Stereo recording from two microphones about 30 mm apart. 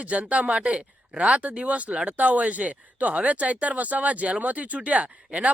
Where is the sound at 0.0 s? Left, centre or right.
Right.